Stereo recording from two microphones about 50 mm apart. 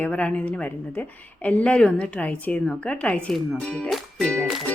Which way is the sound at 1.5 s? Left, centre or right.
Left.